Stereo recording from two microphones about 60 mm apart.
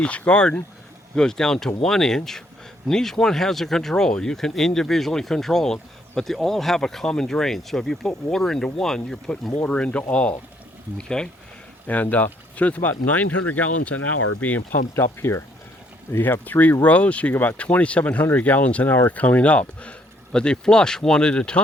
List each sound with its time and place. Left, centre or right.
0.0 s speech: centre
9.6 s speech: left
11.9 s speech: left
14.9 s speech: left
16.1 s speech: left; by 21.6 s centre